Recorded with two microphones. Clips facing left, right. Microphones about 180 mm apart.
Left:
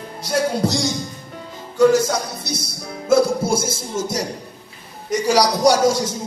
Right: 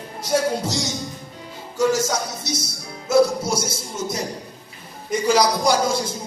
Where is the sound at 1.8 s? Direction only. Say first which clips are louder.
Left 5 dB; 60° left (ahead or behind).